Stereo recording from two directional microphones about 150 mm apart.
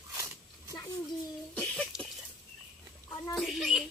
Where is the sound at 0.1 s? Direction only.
20° right (ahead or behind).